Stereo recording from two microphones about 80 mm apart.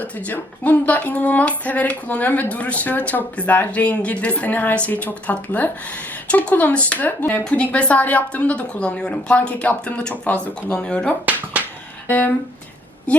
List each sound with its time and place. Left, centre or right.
0.3 s speech: left
11.6 s music: centre
12.0 s speech: left